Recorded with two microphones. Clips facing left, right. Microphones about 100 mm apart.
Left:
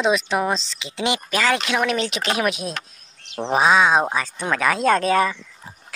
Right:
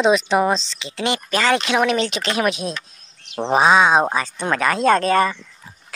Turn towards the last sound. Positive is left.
turn(degrees=5)  # may be behind; listen again after turning